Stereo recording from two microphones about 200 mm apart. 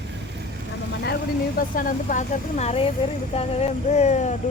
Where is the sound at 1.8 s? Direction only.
40° left (ahead or behind).